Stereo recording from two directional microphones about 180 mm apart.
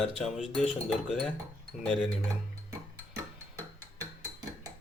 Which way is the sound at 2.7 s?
15° right (ahead or behind).